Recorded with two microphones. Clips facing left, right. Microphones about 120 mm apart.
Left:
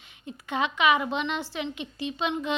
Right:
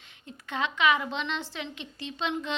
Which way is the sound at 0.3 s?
15° left (ahead or behind).